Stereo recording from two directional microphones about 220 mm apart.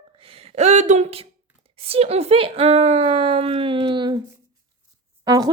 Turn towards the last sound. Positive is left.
turn(degrees=-15)  # may be behind; listen again after turning